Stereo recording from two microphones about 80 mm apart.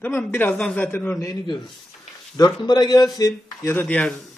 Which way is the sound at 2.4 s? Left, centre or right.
Left.